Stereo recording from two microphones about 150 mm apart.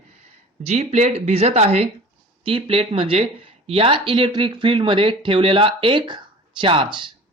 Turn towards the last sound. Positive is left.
turn(degrees=-35)  # may be behind; listen again after turning